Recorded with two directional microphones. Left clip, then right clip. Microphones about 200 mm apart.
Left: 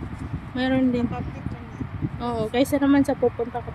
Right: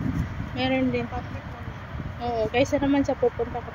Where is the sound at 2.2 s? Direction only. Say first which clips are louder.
Even; 20° left (ahead or behind).